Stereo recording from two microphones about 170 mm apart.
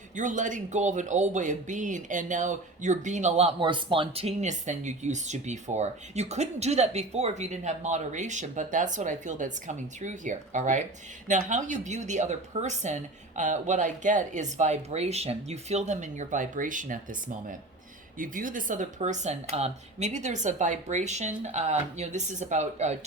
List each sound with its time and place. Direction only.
0.2 s speech: 50° right (ahead or behind)
18.2 s speech: 50° right (ahead or behind)